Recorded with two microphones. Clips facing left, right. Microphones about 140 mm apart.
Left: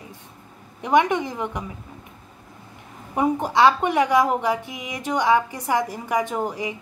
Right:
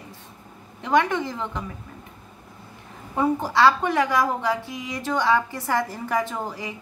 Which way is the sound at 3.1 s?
15° left (ahead or behind).